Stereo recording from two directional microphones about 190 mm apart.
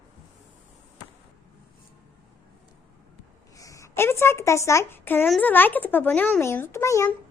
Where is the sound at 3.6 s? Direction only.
15° left (ahead or behind).